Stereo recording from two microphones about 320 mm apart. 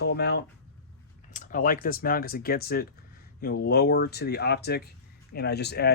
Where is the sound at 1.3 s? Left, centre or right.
Left.